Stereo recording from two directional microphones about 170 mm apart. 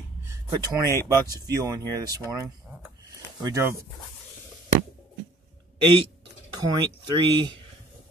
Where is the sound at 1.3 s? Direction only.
20° right (ahead or behind).